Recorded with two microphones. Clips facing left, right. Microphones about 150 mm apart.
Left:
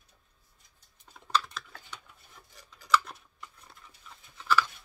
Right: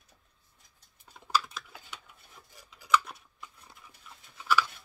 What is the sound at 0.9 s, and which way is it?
Typing, 5° right (ahead or behind).